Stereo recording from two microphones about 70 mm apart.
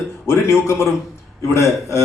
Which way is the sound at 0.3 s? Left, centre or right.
Left.